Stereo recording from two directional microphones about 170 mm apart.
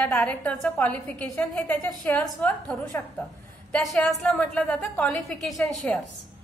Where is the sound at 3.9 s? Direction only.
5° left (ahead or behind).